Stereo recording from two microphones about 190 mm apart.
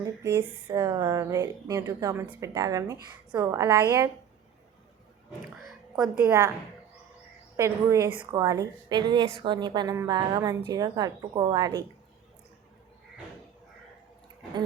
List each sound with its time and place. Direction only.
0.0 s speech: 15° right (ahead or behind)
6.0 s speech: 5° right (ahead or behind)
7.5 s a woman's voice: 15° right (ahead or behind)